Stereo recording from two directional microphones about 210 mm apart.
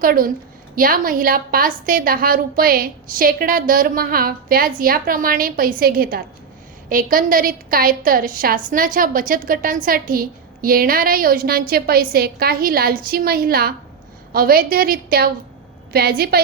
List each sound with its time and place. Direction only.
0.0 s a woman's voice: 45° right (ahead or behind)